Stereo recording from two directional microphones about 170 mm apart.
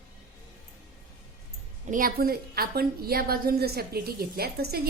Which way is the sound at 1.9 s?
55° right (ahead or behind).